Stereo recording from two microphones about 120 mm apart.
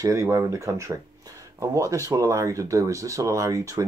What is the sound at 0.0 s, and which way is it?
Speech, 25° right (ahead or behind).